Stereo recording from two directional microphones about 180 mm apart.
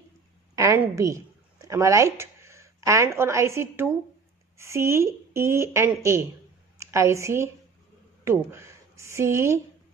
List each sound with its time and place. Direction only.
0.6 s a woman's voice: 15° right (ahead or behind)